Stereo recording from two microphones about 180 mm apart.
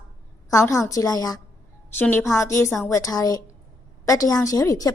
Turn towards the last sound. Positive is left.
turn(degrees=20)  # may be behind; listen again after turning